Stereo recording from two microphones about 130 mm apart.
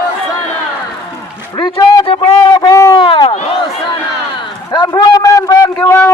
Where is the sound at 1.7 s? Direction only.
25° left (ahead or behind).